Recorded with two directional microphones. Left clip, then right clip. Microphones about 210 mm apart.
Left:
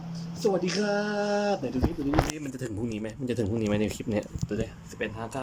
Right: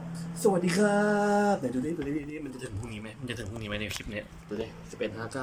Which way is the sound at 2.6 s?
45° left (ahead or behind).